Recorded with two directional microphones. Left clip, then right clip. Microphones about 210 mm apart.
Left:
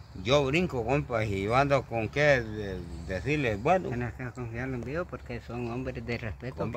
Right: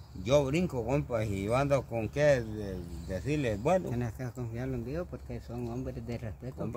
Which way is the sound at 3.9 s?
50° right (ahead or behind).